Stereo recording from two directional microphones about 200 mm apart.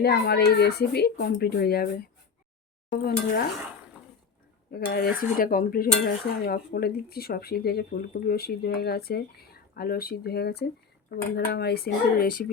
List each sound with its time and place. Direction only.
0.0 s speech: 55° left (ahead or behind)
4.7 s speech: 55° left (ahead or behind)